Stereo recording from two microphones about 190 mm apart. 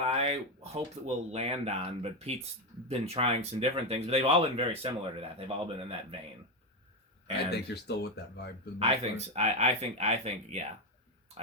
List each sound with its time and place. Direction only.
0.0 s a sound: 35° right (ahead or behind)
1.0 s speech: 35° right (ahead or behind)
7.5 s speech: 60° left (ahead or behind)
8.8 s speech: 35° right (ahead or behind)